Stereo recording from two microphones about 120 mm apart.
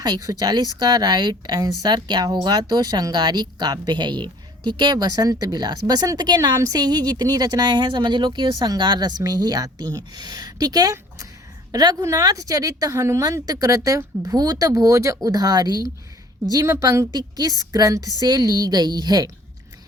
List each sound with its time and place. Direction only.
0.0 s a woman's voice: 35° right (ahead or behind)